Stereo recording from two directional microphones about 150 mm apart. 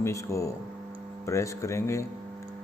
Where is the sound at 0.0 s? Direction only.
20° left (ahead or behind).